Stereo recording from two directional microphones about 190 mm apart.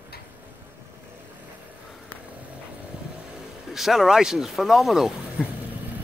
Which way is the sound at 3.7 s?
Centre (ahead or behind).